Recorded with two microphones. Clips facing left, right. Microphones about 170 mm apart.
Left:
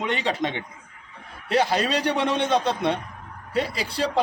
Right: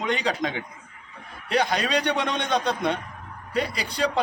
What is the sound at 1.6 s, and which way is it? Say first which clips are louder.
Speech: left 2 dB; 5° left (ahead or behind).